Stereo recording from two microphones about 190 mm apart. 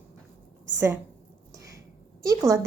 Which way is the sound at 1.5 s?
15° right (ahead or behind).